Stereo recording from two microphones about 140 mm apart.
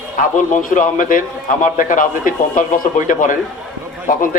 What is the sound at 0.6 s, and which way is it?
A man's voice, 75° left (ahead or behind).